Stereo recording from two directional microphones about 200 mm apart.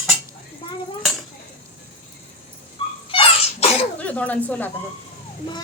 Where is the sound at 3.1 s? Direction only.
25° left (ahead or behind).